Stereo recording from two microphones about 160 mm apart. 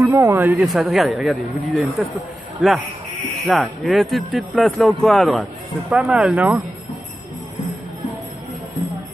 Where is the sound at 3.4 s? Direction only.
5° left (ahead or behind).